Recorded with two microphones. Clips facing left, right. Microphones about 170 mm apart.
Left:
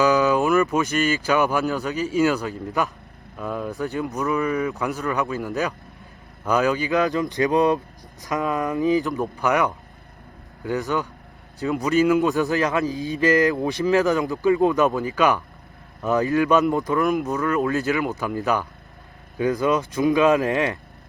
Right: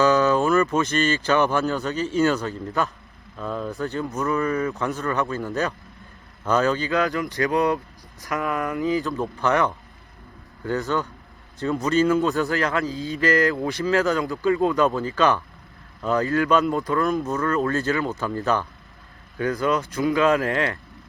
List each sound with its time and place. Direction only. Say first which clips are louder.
0.0 s a sound: even; 10° left (ahead or behind)
0.5 s speech: left 1 dB; centre (ahead or behind)
0.8 s a man's voice: even; 15° left (ahead or behind)